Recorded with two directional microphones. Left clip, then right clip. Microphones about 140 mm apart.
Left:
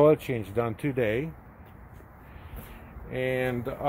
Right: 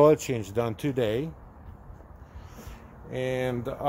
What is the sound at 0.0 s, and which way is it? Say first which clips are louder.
Speech: right 1 dB; 15° right (ahead or behind).